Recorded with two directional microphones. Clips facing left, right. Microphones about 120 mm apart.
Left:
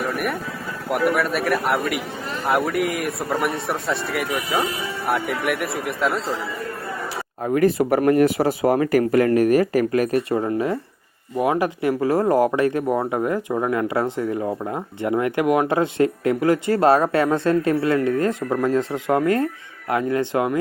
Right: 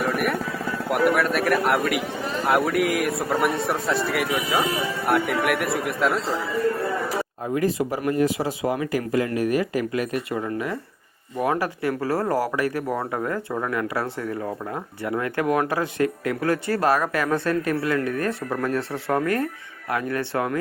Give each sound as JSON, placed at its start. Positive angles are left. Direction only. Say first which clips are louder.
{"t": 0.0, "sound": "vehicle", "louder": "right 1 dB", "side_deg": 0}
{"t": 0.9, "sound": "speech", "louder": "even", "side_deg": 0}
{"t": 7.4, "sound": "speech", "louder": "left 7 dB", "side_deg": 55}
{"t": 11.3, "sound": "speech", "louder": "left 3 dB", "side_deg": 15}